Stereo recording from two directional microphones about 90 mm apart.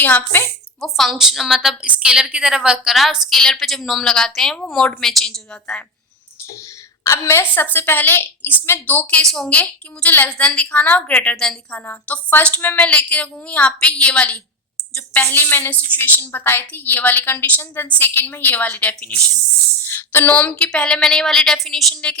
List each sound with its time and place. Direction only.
0.0 s a woman's voice: 20° left (ahead or behind)
0.8 s a woman's voice: centre (ahead or behind)
7.1 s a woman's voice: 30° left (ahead or behind); by 19.2 s 15° left (ahead or behind)
19.8 s a woman's voice: 25° left (ahead or behind); by 21.8 s 5° left (ahead or behind)